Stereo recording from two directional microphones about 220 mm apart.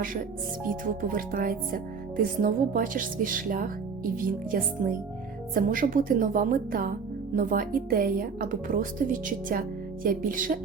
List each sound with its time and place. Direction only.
0.7 s speech: 40° right (ahead or behind)